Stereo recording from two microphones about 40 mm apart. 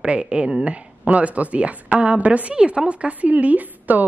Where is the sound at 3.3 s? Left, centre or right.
Right.